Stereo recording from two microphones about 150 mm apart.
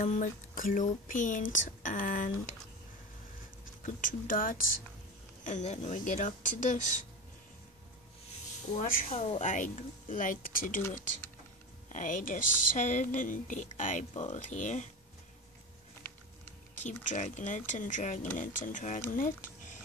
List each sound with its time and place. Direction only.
0.0 s a woman's voice: 55° left (ahead or behind)
3.8 s a woman's voice: 60° left (ahead or behind)
5.4 s a woman's voice: 50° left (ahead or behind)
8.7 s speech: 65° left (ahead or behind)
9.1 s speech: 40° left (ahead or behind)
9.4 s a woman's voice: 55° left (ahead or behind)
11.9 s a woman's voice: 60° left (ahead or behind)
16.8 s a woman's voice: 55° left (ahead or behind)